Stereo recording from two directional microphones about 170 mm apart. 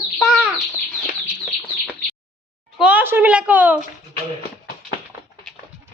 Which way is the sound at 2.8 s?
10° right (ahead or behind).